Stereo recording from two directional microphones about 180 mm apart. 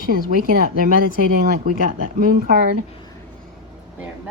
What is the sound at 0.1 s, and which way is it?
Speech, 50° right (ahead or behind).